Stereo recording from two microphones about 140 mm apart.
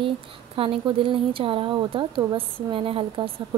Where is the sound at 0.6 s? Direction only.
40° right (ahead or behind).